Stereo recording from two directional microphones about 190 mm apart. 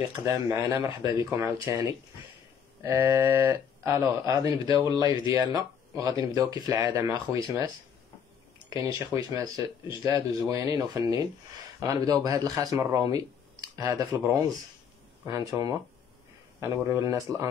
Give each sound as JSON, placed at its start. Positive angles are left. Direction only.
{"t": 0.1, "sound": "speech", "side_deg": -15}
{"t": 5.0, "sound": "speech", "side_deg": 25}
{"t": 5.3, "sound": "speech", "side_deg": -20}
{"t": 8.6, "sound": "speech", "side_deg": -15}